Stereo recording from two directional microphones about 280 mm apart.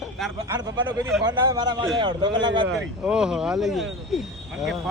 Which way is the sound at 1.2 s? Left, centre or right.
Centre.